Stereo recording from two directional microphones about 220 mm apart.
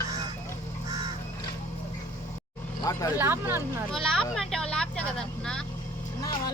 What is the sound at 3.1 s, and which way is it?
Speech, 10° right (ahead or behind).